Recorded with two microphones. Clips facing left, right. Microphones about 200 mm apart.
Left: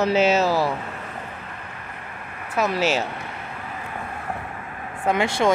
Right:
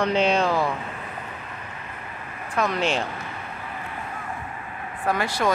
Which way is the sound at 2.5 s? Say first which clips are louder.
Left 2 dB; 5° left (ahead or behind).